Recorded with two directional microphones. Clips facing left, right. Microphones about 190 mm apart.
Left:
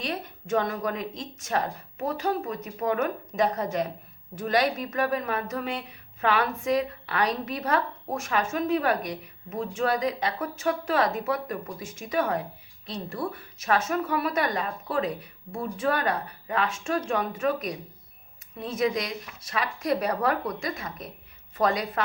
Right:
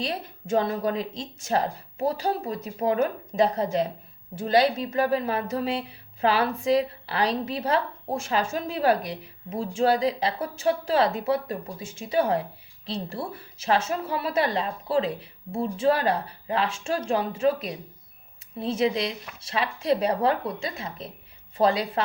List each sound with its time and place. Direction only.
0.0 s a woman's voice: 30° right (ahead or behind)